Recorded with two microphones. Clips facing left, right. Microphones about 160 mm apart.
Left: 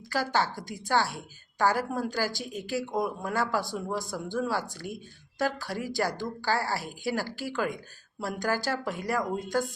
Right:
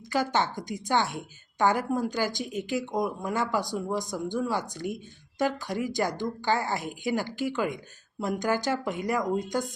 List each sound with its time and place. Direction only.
0.1 s a woman's voice: 20° right (ahead or behind)